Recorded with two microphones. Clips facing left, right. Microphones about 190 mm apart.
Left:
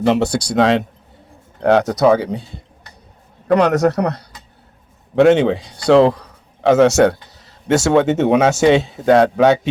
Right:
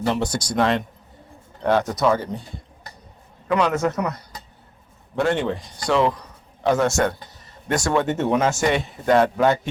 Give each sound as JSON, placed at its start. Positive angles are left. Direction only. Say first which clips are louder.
{"t": 0.0, "sound": "speech", "louder": "left 7 dB", "side_deg": 75}
{"t": 1.6, "sound": "speech", "louder": "left 6 dB", "side_deg": 75}
{"t": 3.7, "sound": "speech", "louder": "left 7 dB", "side_deg": 70}
{"t": 5.2, "sound": "speech", "louder": "left 10 dB", "side_deg": 80}